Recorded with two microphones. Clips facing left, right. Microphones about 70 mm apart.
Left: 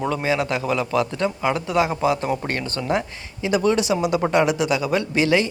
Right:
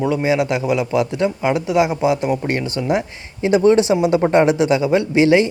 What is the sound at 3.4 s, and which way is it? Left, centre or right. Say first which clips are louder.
A man's voice: right 7 dB; right.